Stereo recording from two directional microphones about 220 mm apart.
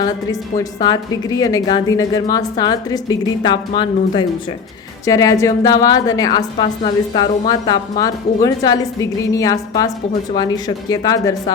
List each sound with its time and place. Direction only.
0.0 s a woman's voice: 15° left (ahead or behind)